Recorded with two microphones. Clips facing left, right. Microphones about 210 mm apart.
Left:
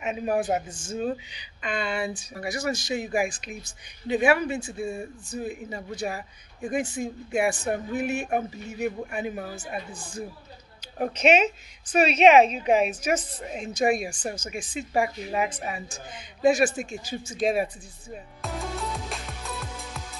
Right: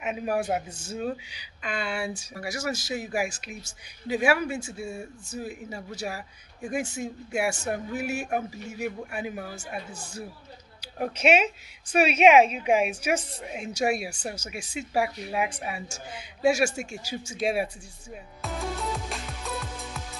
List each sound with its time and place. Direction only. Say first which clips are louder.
0.0 s speech: left 2 dB; 10° right (ahead or behind)
0.7 s speech: left 2 dB; 50° left (ahead or behind)
0.9 s a man's voice: left 3 dB; 5° right (ahead or behind)
18.1 s music: left 1 dB; centre (ahead or behind)